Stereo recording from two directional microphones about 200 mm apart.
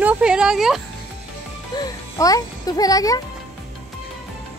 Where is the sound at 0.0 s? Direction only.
5° right (ahead or behind).